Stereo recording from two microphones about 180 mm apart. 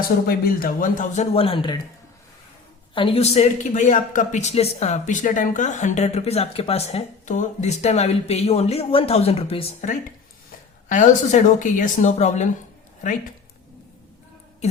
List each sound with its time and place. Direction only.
0.3 s a man's voice: 55° left (ahead or behind); by 1.8 s 25° left (ahead or behind)
2.9 s a man's voice: 30° left (ahead or behind)
10.8 s speech: 45° left (ahead or behind)